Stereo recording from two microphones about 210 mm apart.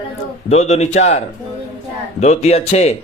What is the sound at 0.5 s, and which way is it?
Speech, 30° left (ahead or behind).